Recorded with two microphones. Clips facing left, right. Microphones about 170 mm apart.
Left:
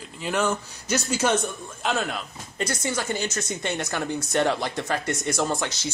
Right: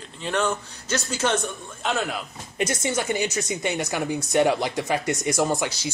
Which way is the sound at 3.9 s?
15° right (ahead or behind).